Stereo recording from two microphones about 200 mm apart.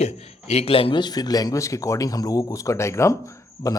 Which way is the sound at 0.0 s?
35° left (ahead or behind).